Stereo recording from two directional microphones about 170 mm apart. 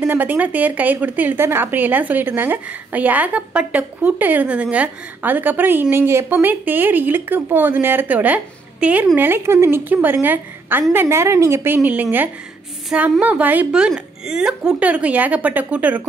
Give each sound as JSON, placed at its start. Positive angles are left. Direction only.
{"t": 0.0, "sound": "speech", "side_deg": -10}